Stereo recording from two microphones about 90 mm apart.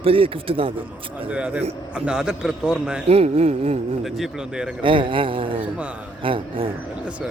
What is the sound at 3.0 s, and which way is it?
Speech, 90° right.